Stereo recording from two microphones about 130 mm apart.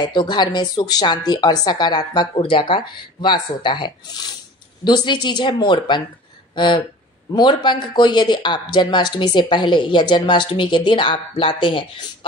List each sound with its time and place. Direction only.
0.0 s speech: 35° left (ahead or behind)